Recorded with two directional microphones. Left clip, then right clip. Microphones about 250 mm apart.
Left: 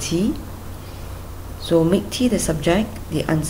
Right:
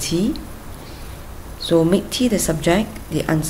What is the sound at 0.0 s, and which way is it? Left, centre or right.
Speech, centre.